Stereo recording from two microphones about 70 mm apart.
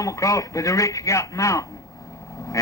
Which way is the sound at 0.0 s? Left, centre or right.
Left.